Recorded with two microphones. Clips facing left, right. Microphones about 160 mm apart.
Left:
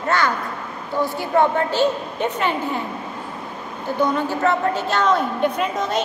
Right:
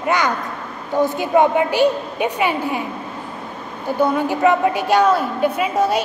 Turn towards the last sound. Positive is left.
turn(degrees=-10)  # may be behind; listen again after turning